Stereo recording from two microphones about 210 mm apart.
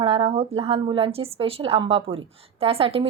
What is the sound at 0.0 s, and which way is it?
A woman's voice, 25° right (ahead or behind).